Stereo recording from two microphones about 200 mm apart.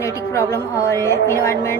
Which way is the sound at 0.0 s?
15° left (ahead or behind).